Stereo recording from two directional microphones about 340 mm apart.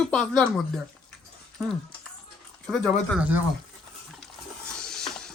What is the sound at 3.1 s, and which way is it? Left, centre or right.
Speech, centre.